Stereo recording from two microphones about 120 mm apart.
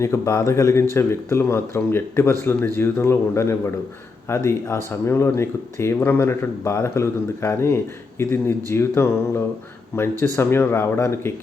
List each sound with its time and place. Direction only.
0.0 s speech: 25° left (ahead or behind)